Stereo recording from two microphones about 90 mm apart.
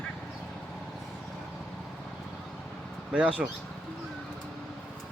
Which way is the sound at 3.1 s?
15° right (ahead or behind).